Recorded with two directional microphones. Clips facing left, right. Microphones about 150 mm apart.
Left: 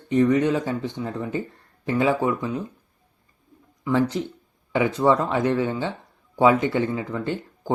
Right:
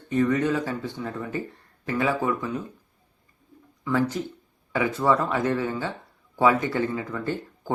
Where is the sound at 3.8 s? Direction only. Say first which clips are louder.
Left 3 dB; 20° left (ahead or behind).